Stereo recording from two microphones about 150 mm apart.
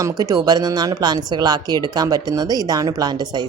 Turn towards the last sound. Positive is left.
turn(degrees=-25)  # may be behind; listen again after turning